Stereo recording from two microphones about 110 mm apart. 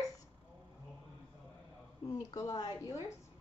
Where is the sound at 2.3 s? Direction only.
35° left (ahead or behind).